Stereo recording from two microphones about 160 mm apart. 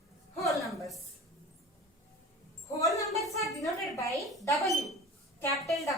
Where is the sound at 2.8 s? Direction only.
20° left (ahead or behind).